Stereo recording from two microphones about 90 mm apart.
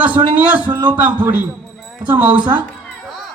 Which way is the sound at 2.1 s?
15° right (ahead or behind).